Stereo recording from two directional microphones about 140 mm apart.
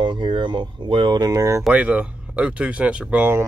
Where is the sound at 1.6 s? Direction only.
10° right (ahead or behind).